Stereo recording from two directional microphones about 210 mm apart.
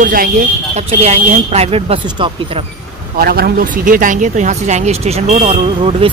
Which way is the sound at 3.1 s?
45° right (ahead or behind).